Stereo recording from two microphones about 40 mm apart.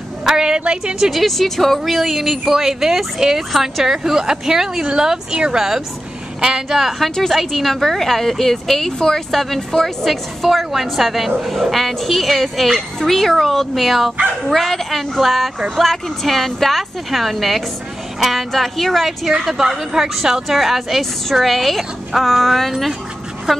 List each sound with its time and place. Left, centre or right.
0.2 s a woman's voice: centre
1.1 s a woman's voice: centre